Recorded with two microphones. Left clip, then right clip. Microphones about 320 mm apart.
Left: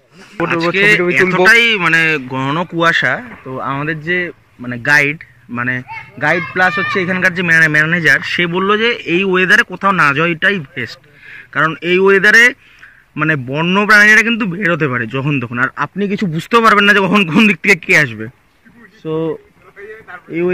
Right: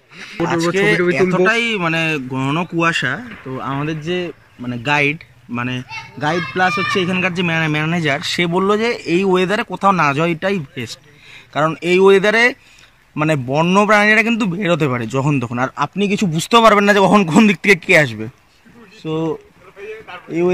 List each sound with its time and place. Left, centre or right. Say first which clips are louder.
0.5 s speech: left 4 dB; right
1.5 s a man's voice: left 8 dB; centre